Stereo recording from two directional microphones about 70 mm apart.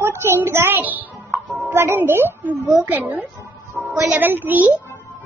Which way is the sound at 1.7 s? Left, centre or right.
Right.